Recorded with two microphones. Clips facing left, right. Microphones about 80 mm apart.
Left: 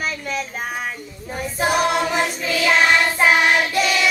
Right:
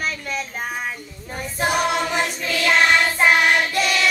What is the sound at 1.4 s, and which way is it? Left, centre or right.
Child singing, centre.